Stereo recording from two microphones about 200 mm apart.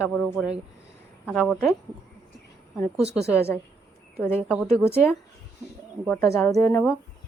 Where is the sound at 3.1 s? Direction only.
5° right (ahead or behind).